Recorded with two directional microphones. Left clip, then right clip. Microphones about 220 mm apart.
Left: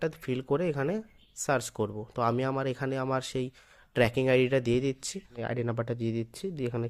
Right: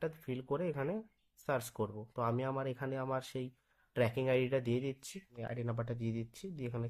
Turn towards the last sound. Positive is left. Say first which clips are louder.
# left 10 dB
turn(degrees=40)  # may be behind; listen again after turning